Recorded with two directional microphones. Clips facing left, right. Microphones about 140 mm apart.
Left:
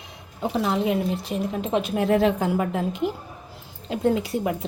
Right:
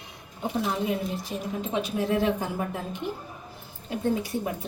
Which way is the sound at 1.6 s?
65° left (ahead or behind).